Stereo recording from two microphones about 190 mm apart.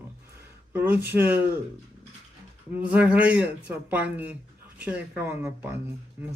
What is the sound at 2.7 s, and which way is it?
Speech, 5° right (ahead or behind).